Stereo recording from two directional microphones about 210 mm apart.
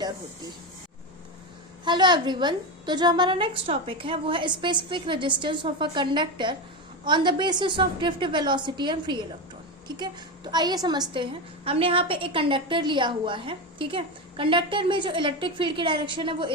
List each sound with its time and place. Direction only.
1.8 s a woman's voice: 20° right (ahead or behind)